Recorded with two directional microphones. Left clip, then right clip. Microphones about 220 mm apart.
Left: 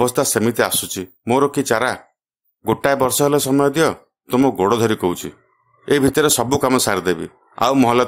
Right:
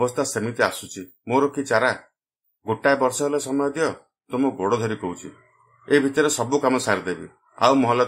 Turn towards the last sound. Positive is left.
turn(degrees=40)  # may be behind; listen again after turning